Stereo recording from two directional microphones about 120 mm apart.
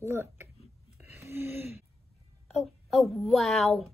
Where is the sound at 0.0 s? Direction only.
20° right (ahead or behind).